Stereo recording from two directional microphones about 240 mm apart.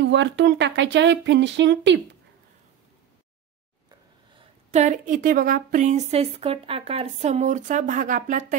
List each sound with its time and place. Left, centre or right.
0.0 s speech: right
4.7 s a woman's voice: right